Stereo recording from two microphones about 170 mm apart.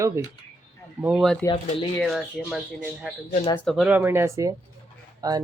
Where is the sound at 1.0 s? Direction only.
Centre (ahead or behind).